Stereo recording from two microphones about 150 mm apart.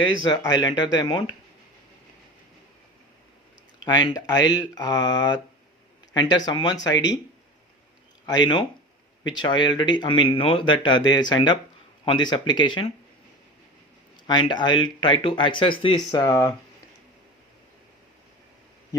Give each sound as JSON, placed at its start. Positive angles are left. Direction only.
{"t": 0.0, "sound": "speech", "side_deg": 30}
{"t": 3.8, "sound": "speech", "side_deg": 25}
{"t": 8.3, "sound": "speech", "side_deg": 30}
{"t": 14.3, "sound": "speech", "side_deg": 30}